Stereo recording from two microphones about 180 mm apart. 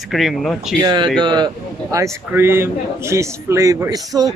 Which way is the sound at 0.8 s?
20° right (ahead or behind).